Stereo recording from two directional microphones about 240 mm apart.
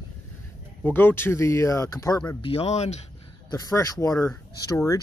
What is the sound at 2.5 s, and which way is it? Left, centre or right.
Speech, left.